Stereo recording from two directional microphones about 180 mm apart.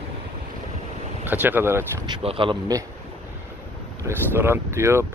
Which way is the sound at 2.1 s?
30° right (ahead or behind).